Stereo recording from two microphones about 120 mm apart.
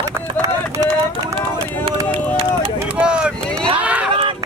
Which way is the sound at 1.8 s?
50° right (ahead or behind).